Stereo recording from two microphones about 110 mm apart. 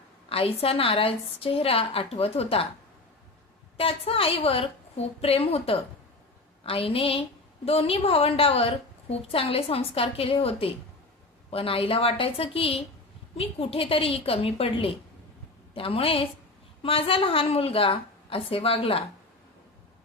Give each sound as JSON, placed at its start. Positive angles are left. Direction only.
{"t": 0.3, "sound": "a woman's voice", "side_deg": 60}
{"t": 3.8, "sound": "a woman's voice", "side_deg": 60}